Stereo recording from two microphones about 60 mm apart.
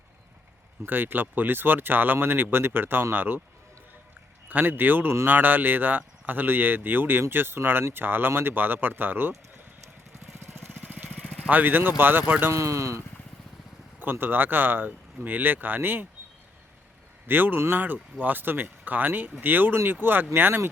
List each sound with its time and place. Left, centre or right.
0.9 s speech: right
4.4 s speech: right
10.4 s vehicle: right
10.7 s lawn mower: right
11.1 s vehicle: centre
11.4 s speech: right
12.5 s speech: right
14.0 s speech: right
17.2 s speech: right